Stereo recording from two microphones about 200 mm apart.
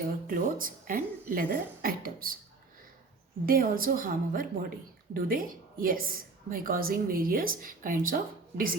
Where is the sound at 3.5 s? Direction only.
45° right (ahead or behind).